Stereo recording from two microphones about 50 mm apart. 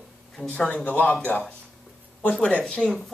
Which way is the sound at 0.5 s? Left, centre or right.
Left.